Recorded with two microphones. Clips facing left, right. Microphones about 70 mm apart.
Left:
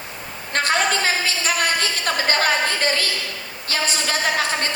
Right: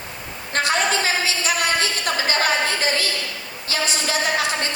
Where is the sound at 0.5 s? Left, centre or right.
Left.